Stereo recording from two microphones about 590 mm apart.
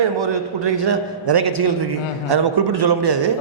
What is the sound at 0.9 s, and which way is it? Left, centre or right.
A man's voice, right.